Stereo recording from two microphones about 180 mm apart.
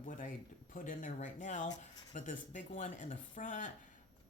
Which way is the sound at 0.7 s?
50° left (ahead or behind).